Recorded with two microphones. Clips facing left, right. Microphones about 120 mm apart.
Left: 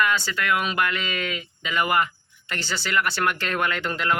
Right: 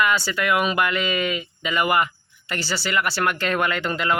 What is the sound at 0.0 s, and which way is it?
Speech, 10° right (ahead or behind).